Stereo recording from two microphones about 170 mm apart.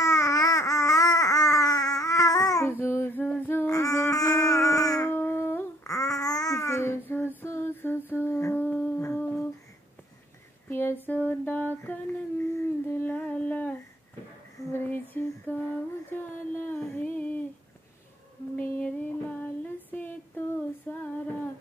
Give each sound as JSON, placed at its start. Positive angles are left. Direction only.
{"t": 0.0, "sound": "baby cry", "side_deg": 20}
{"t": 2.8, "sound": "a sound", "side_deg": 15}
{"t": 7.1, "sound": "female singing", "side_deg": 10}
{"t": 8.1, "sound": "humming", "side_deg": 15}
{"t": 10.7, "sound": "a sound", "side_deg": 15}
{"t": 18.6, "sound": "female singing", "side_deg": 10}